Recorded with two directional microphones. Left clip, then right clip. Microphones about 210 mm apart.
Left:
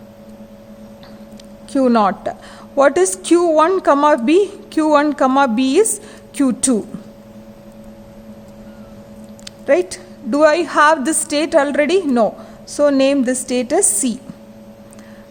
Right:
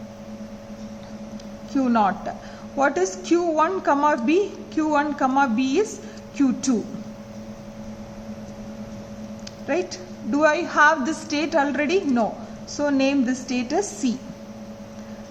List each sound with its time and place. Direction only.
1.7 s a woman's voice: 45° left (ahead or behind)
9.6 s a woman's voice: 45° left (ahead or behind)